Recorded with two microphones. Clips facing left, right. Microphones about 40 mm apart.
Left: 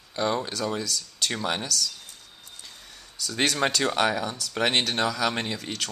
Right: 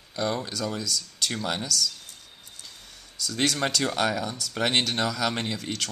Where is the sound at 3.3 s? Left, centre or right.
Left.